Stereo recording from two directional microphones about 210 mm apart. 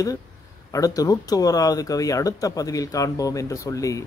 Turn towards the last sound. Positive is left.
turn(degrees=15)  # may be behind; listen again after turning